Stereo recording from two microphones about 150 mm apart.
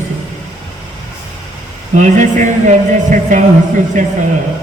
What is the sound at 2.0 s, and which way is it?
A man's voice, 55° right (ahead or behind).